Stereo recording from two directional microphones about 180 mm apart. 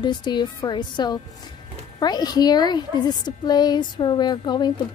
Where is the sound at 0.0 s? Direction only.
25° left (ahead or behind).